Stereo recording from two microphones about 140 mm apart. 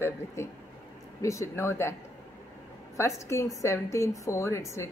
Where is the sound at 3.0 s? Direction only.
20° left (ahead or behind).